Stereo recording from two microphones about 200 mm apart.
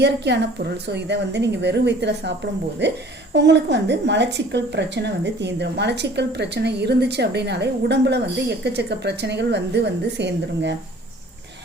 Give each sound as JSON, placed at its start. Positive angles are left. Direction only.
{"t": 0.0, "sound": "a woman's voice", "side_deg": -60}